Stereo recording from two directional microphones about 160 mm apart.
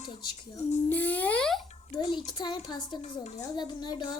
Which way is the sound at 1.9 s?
25° left (ahead or behind).